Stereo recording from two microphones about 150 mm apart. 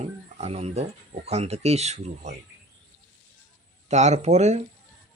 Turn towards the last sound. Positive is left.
turn(degrees=-50)  # may be behind; listen again after turning